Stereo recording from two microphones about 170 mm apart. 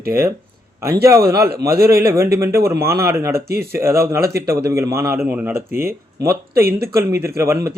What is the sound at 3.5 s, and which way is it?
Speech, 65° right (ahead or behind).